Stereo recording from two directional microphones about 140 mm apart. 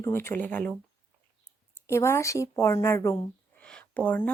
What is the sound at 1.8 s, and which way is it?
A woman's voice, 20° left (ahead or behind).